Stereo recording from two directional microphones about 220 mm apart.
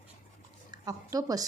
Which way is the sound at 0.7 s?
15° right (ahead or behind).